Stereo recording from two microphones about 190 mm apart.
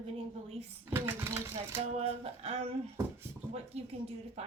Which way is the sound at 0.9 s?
15° right (ahead or behind).